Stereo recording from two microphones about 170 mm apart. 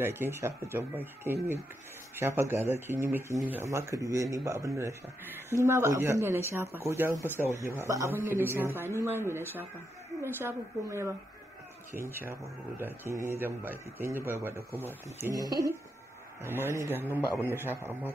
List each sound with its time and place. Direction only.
0.0 s speech: 15° right (ahead or behind)